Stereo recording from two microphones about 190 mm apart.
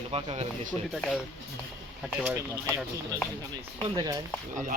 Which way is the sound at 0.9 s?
Centre (ahead or behind).